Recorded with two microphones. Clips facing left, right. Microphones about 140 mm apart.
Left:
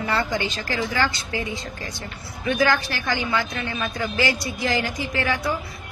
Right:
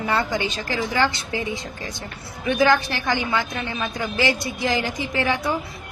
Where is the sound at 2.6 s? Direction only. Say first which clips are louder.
Right 4 dB; 20° right (ahead or behind).